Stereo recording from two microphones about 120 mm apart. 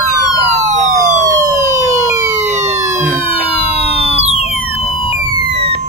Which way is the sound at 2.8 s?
25° right (ahead or behind).